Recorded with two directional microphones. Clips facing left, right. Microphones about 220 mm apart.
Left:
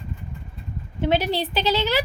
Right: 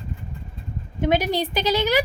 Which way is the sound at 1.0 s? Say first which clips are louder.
Right 1 dB; 15° right (ahead or behind).